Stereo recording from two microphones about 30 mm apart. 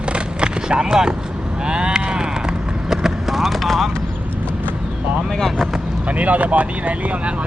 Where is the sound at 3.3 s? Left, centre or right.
Centre.